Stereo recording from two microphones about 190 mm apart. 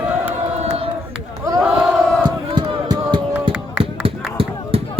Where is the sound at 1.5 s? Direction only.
Centre (ahead or behind).